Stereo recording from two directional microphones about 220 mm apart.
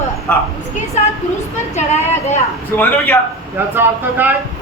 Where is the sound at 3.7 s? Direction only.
10° right (ahead or behind).